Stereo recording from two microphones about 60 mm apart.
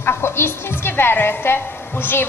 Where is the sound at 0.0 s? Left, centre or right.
Left.